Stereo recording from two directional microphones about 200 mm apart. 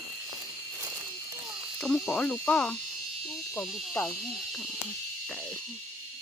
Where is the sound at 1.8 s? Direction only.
Centre (ahead or behind).